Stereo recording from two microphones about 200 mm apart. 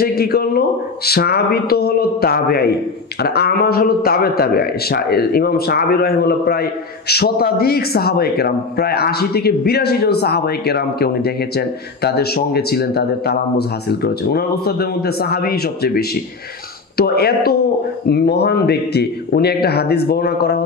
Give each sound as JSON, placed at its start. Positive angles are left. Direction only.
{"t": 0.0, "sound": "a man's voice", "side_deg": 50}